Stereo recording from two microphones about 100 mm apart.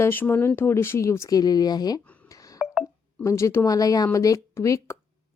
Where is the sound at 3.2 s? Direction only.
30° left (ahead or behind).